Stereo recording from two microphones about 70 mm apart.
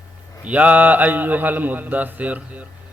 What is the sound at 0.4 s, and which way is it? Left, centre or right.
A man's voice, centre.